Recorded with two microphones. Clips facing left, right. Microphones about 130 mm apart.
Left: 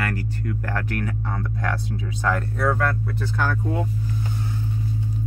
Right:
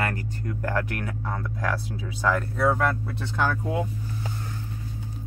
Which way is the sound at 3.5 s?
5° right (ahead or behind).